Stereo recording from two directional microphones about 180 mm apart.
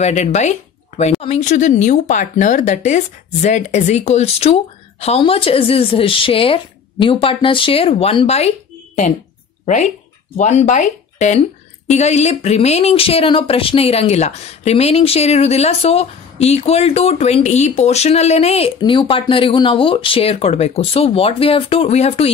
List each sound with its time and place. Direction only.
0.0 s speech: 40° left (ahead or behind)
10.3 s speech: 40° left (ahead or behind)